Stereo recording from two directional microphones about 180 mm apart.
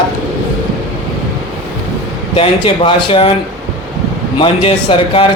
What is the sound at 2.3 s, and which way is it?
Speech, 30° left (ahead or behind).